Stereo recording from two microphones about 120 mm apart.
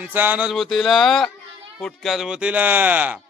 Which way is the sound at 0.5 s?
5° left (ahead or behind).